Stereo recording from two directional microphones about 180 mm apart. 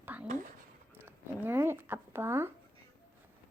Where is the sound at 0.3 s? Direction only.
45° right (ahead or behind).